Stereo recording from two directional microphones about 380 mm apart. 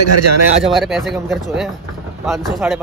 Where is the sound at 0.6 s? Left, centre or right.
Centre.